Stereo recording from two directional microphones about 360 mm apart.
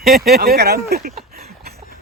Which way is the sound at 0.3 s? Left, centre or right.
Right.